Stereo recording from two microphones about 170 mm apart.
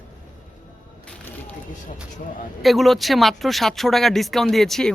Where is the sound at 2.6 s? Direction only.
Centre (ahead or behind).